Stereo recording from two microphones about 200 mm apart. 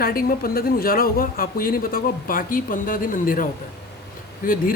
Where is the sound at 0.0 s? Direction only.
45° left (ahead or behind).